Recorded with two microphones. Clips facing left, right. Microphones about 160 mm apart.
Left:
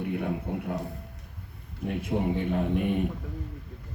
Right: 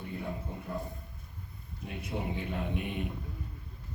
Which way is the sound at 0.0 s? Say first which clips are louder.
Left 8 dB; 70° left (ahead or behind).